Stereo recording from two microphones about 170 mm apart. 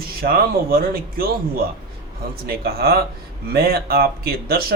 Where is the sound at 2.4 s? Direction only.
65° right (ahead or behind).